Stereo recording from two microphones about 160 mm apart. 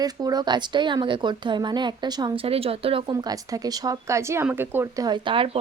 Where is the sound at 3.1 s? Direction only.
25° right (ahead or behind).